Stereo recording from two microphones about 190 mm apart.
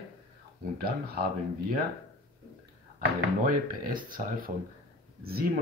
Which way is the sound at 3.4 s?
45° right (ahead or behind).